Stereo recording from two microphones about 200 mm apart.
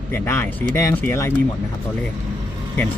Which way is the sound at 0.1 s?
15° left (ahead or behind).